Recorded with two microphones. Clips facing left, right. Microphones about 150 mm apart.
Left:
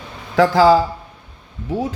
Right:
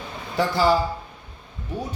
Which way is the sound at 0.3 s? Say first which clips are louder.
Left 8 dB; 90° left.